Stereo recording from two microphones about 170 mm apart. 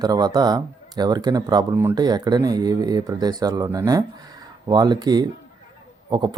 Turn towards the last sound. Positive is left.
turn(degrees=-25)  # may be behind; listen again after turning